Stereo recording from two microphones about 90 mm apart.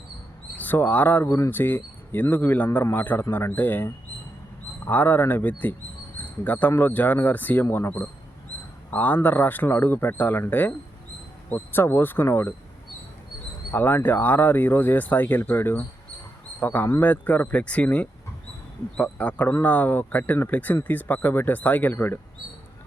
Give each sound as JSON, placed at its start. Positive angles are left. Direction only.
{"t": 0.5, "sound": "speech", "side_deg": 20}
{"t": 13.7, "sound": "a man's voice", "side_deg": 20}